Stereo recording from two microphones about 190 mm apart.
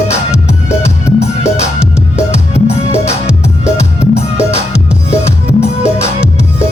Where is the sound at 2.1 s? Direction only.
35° left (ahead or behind).